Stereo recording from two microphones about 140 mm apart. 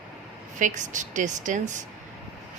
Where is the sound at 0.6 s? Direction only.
60° right (ahead or behind).